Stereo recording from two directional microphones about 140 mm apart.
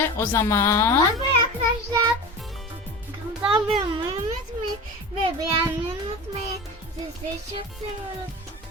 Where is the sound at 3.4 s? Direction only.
40° right (ahead or behind).